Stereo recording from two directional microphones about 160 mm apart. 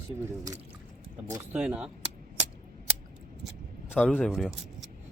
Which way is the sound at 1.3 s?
10° right (ahead or behind).